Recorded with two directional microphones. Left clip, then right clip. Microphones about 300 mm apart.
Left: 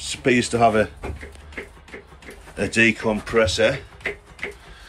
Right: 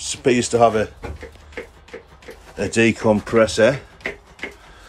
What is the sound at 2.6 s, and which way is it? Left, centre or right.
Speech, centre.